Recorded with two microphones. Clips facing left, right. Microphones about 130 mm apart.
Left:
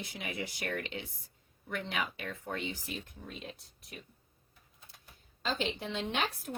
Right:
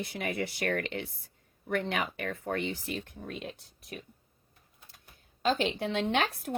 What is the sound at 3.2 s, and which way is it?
Speech, centre (ahead or behind).